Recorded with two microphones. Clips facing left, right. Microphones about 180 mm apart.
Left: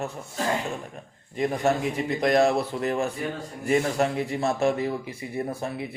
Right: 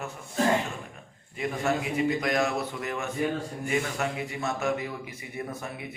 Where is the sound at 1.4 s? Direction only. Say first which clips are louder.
Left 4 dB; 35° left (ahead or behind).